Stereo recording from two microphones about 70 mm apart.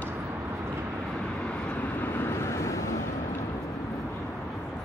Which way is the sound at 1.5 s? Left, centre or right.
Left.